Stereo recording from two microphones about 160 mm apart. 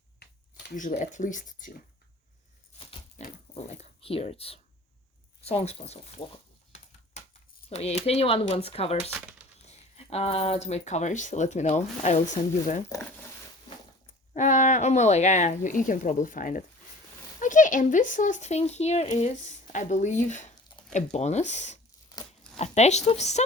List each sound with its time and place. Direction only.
0.2 s a sound: 90° left
0.8 s speech: 50° left (ahead or behind)
3.2 s speech: 45° left (ahead or behind)
7.7 s speech: 40° left (ahead or behind)
14.3 s speech: 50° left (ahead or behind)